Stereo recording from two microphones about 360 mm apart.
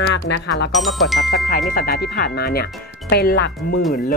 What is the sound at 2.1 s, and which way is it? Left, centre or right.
Speech, left.